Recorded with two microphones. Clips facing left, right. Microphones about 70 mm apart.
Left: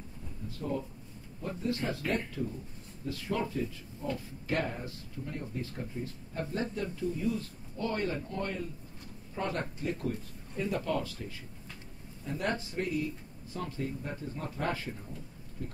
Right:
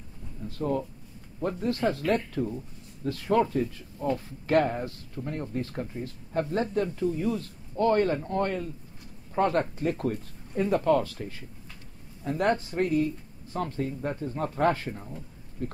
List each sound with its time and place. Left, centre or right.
0.6 s speech: right